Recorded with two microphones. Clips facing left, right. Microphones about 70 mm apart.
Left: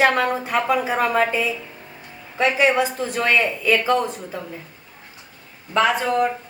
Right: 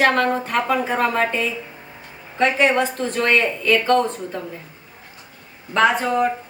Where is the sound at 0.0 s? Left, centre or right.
Centre.